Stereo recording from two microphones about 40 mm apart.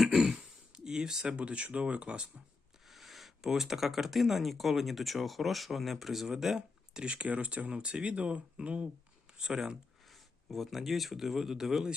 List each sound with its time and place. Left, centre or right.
0.0 s speech: centre
1.4 s speech: right
2.8 s speech: centre
6.6 s speech: right
9.4 s speech: centre
10.0 s speech: centre